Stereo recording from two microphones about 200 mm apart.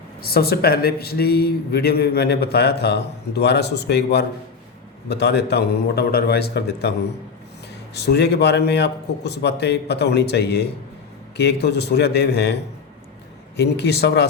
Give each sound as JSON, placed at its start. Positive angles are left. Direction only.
{"t": 0.3, "sound": "a man's voice", "side_deg": 50}
{"t": 7.9, "sound": "a man's voice", "side_deg": 55}
{"t": 13.6, "sound": "a man's voice", "side_deg": 55}